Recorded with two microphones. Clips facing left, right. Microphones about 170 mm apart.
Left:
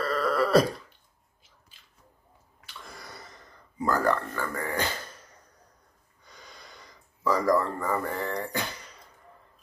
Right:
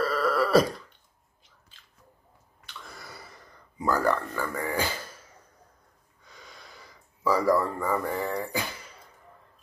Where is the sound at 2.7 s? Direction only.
Centre (ahead or behind).